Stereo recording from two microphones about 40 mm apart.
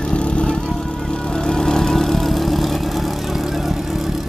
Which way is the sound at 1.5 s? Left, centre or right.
Centre.